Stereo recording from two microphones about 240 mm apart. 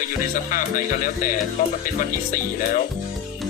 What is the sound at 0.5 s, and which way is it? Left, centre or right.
Music, left.